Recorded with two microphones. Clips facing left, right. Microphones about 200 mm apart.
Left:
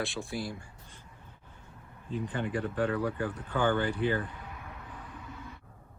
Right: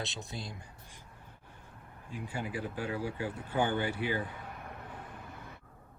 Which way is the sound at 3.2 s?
60° left (ahead or behind).